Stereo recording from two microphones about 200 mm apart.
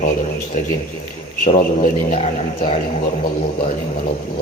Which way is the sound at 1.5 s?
45° left (ahead or behind).